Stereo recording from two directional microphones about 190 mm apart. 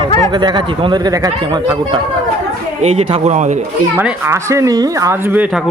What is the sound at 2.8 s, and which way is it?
Speech, 35° right (ahead or behind).